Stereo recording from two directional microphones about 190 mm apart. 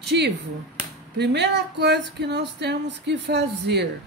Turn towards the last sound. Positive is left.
turn(degrees=-65)  # may be behind; listen again after turning